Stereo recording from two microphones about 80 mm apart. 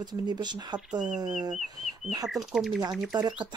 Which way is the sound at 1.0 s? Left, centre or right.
Centre.